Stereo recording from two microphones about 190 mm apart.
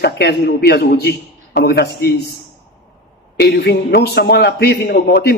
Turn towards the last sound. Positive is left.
turn(degrees=55)  # may be behind; listen again after turning